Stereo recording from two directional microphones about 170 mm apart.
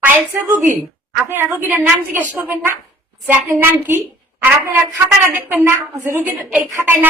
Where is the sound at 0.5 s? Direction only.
50° right (ahead or behind).